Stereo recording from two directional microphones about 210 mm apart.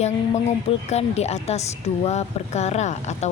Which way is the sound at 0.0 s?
30° left (ahead or behind).